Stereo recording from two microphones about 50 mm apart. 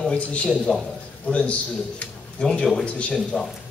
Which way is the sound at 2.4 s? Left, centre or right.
Centre.